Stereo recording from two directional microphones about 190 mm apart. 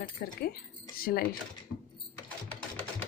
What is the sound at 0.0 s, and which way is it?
Speech, 55° left (ahead or behind).